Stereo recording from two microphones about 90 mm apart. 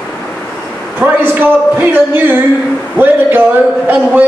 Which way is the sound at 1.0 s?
20° right (ahead or behind).